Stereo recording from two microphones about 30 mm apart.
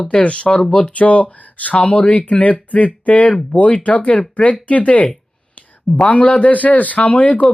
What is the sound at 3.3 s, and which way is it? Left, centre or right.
Speech, left.